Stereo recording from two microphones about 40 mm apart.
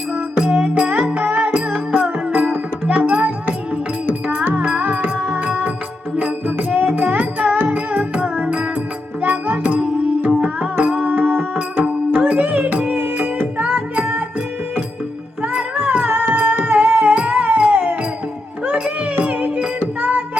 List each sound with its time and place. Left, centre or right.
0.8 s music: right
1.0 s music: right
1.5 s music: right
6.1 s music: right
15.4 s music: right
16.0 s music: right